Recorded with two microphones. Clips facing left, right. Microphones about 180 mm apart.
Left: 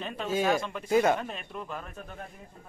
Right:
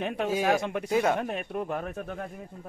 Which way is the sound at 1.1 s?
60° right (ahead or behind).